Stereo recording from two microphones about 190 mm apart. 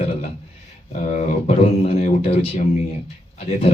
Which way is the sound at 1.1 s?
35° left (ahead or behind).